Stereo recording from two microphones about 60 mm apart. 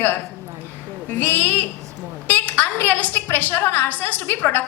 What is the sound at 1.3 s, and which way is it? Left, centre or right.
Speech, left.